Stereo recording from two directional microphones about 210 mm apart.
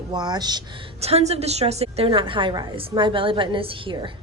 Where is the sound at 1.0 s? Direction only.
30° right (ahead or behind).